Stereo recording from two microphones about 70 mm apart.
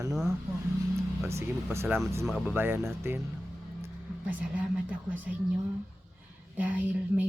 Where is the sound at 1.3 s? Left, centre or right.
Right.